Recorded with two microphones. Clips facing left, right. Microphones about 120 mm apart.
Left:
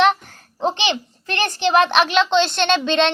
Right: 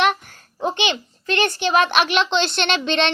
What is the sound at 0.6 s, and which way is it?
Babbling, 30° left (ahead or behind).